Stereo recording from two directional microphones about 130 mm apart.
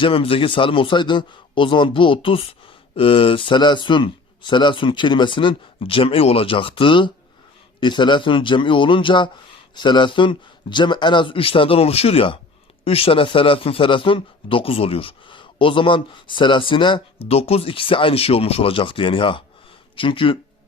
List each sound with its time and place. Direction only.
0.0 s a man's voice: 45° left (ahead or behind)